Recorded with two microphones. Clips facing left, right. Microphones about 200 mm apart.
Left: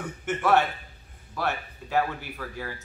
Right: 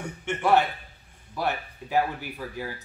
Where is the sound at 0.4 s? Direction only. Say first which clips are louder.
Right 1 dB; 15° right (ahead or behind).